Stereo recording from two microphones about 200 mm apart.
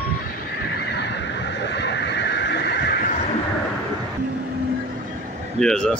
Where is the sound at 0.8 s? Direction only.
60° left (ahead or behind).